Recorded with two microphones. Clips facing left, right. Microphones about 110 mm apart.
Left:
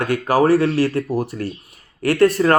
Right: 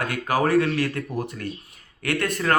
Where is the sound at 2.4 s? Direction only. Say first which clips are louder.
Left 7 dB; 30° left (ahead or behind).